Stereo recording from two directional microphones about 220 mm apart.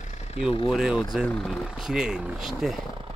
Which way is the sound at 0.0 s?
30° left (ahead or behind).